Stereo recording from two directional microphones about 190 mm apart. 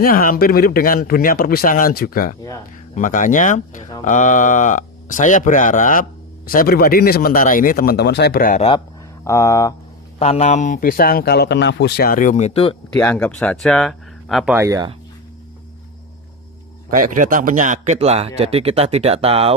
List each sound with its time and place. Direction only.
0.0 s speech: 50° left (ahead or behind)
9.2 s speech: 15° left (ahead or behind)
10.1 s speech: 35° left (ahead or behind)
13.0 s speech: 10° left (ahead or behind)
14.5 s speech: 15° right (ahead or behind)
16.9 s speech: 45° right (ahead or behind)